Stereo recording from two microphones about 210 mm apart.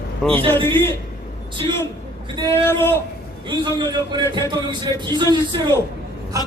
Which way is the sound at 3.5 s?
20° right (ahead or behind).